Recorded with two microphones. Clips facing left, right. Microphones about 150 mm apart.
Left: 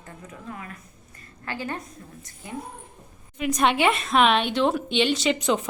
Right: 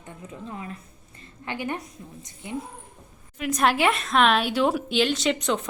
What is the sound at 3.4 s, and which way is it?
A woman's voice, centre (ahead or behind).